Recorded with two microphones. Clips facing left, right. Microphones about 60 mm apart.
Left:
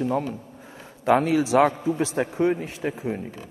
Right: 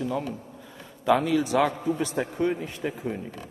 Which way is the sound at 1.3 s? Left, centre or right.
Left.